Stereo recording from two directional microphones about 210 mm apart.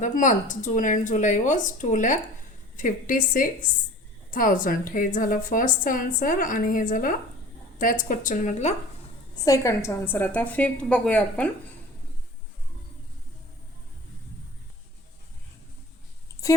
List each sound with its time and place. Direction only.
0.0 s a woman's voice: 35° left (ahead or behind)
9.3 s a woman's voice: 15° left (ahead or behind)